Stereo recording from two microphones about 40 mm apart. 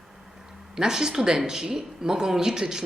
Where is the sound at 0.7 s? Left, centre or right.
Centre.